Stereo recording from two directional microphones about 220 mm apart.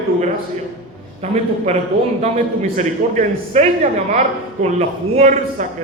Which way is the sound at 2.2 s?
30° right (ahead or behind).